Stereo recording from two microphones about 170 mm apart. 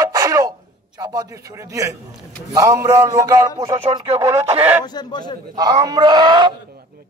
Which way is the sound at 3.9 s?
35° right (ahead or behind).